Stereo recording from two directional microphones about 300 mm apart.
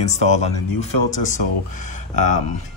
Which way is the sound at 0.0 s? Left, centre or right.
Left.